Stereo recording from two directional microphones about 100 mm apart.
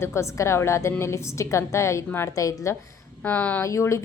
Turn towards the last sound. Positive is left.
turn(degrees=30)  # may be behind; listen again after turning